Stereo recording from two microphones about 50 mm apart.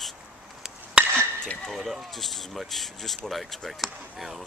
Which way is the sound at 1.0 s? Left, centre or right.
Right.